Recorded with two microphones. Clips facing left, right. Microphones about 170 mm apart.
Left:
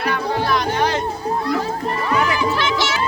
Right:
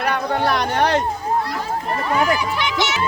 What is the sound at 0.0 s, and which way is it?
Chatter, 60° right (ahead or behind).